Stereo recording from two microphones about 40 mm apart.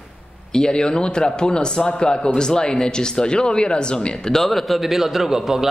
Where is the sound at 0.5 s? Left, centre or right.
Centre.